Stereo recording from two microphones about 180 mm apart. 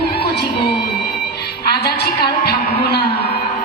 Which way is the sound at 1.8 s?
65° left (ahead or behind).